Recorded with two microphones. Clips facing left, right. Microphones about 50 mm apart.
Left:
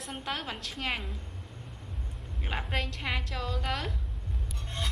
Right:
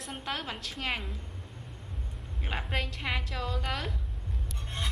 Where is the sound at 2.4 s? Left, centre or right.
Centre.